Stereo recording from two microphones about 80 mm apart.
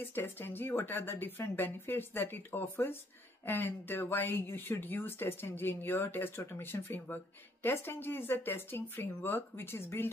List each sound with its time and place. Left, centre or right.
0.0 s speech: left